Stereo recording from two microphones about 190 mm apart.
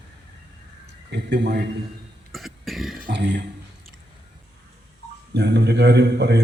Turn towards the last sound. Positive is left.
turn(degrees=-60)  # may be behind; listen again after turning